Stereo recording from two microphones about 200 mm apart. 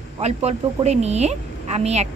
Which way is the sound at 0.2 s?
30° right (ahead or behind).